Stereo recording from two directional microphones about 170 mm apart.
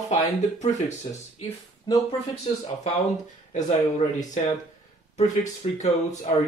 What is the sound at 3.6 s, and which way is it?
Speech, 40° left (ahead or behind).